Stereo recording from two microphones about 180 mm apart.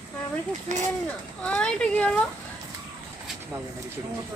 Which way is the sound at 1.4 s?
5° left (ahead or behind).